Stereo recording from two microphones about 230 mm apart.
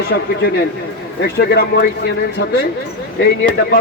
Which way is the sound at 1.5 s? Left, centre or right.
Left.